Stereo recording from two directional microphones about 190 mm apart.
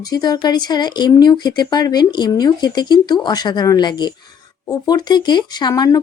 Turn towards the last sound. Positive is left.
turn(degrees=20)  # may be behind; listen again after turning